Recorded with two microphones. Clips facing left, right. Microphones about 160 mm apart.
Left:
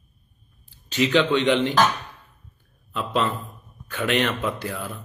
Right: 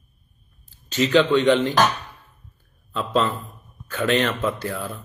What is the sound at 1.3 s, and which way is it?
Speech, 20° left (ahead or behind).